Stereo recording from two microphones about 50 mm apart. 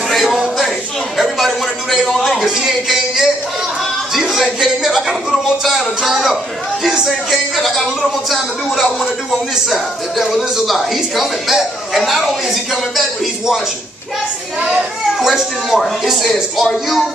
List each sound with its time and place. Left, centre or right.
0.1 s a man's voice: centre
9.7 s speech: centre
14.6 s a man's voice: centre
15.1 s a man's voice: centre